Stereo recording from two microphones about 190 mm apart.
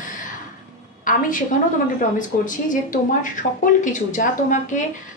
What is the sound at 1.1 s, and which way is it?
A woman's voice, 45° left (ahead or behind).